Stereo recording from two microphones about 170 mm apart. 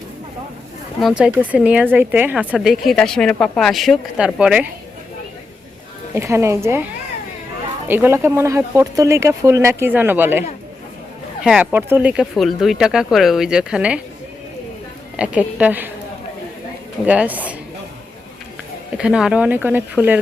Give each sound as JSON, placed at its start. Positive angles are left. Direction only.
{"t": 1.0, "sound": "speech", "side_deg": -5}
{"t": 6.1, "sound": "speech", "side_deg": -15}
{"t": 7.9, "sound": "speech", "side_deg": -10}
{"t": 11.4, "sound": "speech", "side_deg": -5}
{"t": 15.1, "sound": "speech", "side_deg": -5}
{"t": 17.1, "sound": "speech", "side_deg": -10}
{"t": 18.9, "sound": "speech", "side_deg": -5}